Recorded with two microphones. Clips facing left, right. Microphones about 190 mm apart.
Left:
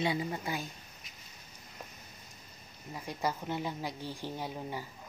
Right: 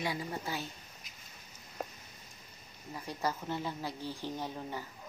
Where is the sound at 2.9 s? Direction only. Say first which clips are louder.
Left 1 dB; 15° left (ahead or behind).